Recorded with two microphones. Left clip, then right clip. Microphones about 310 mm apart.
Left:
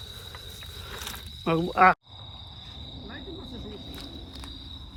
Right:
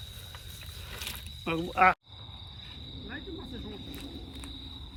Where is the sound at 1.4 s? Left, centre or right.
Left.